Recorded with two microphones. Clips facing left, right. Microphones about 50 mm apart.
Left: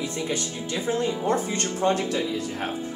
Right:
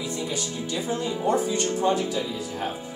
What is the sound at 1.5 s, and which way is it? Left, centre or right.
Speech, left.